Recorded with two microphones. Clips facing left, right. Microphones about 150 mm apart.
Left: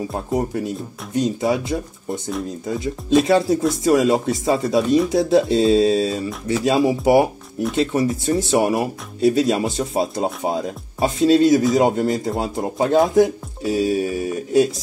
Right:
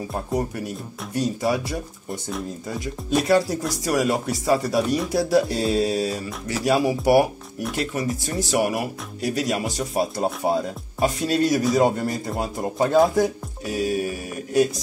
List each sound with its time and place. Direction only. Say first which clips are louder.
0.1 s speech: left 1 dB; 20° left (ahead or behind)